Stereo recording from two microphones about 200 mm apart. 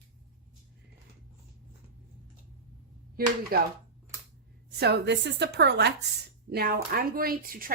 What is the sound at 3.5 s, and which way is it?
Speech, 50° right (ahead or behind).